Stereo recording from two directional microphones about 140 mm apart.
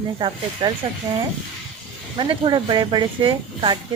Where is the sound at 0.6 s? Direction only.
40° right (ahead or behind).